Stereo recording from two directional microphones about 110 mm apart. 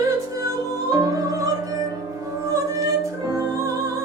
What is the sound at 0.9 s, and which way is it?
Music, 35° right (ahead or behind).